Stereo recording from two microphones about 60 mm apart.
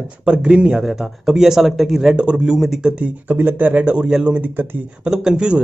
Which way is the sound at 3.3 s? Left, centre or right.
Right.